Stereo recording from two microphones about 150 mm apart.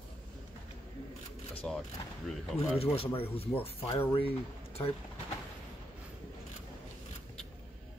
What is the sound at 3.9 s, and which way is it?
Speech, 25° left (ahead or behind).